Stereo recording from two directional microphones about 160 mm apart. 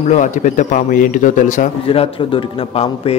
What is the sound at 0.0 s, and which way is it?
A man's voice, 50° left (ahead or behind).